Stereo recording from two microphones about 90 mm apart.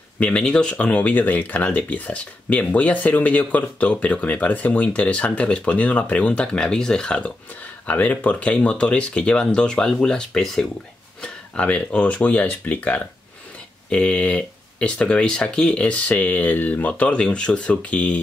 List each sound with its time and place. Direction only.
0.2 s speech: 10° left (ahead or behind)